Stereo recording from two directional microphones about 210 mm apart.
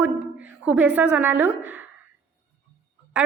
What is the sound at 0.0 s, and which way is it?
A woman's voice, 5° right (ahead or behind).